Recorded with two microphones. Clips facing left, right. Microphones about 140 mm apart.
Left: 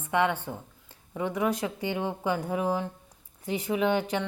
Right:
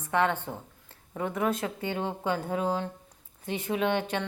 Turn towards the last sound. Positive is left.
turn(degrees=15)  # may be behind; listen again after turning